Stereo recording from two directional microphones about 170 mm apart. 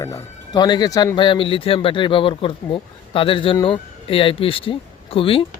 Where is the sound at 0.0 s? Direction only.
20° left (ahead or behind).